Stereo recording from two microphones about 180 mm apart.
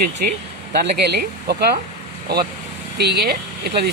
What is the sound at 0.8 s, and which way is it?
Speech, 60° right (ahead or behind).